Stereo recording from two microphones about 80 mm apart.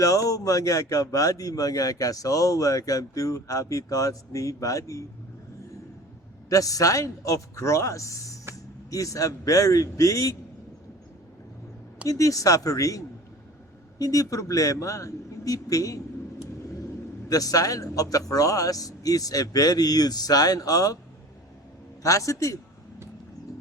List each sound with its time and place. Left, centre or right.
0.0 s a man's voice: left
6.5 s a man's voice: left
12.0 s a man's voice: left
17.2 s a man's voice: left
22.0 s a man's voice: left